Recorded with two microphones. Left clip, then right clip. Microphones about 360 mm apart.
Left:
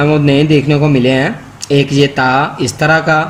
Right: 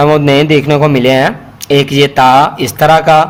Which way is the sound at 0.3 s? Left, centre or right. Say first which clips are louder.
Right 3 dB; centre.